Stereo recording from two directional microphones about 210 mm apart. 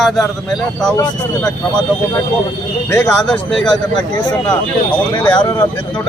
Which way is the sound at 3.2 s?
5° left (ahead or behind).